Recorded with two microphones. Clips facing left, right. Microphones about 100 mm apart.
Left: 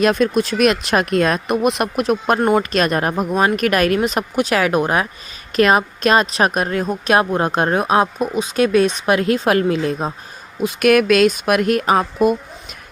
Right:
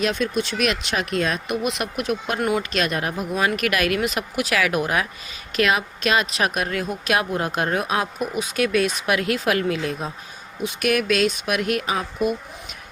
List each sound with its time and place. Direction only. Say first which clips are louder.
0.0 s a woman's voice: left 7 dB; 45° left (ahead or behind)
10.6 s speech: left 8 dB; 50° left (ahead or behind)